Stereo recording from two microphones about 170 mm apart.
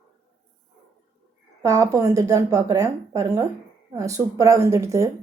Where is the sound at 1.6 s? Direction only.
20° right (ahead or behind).